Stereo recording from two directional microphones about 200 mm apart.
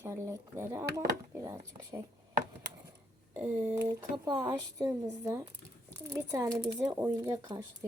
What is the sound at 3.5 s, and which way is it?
Speech, 10° right (ahead or behind).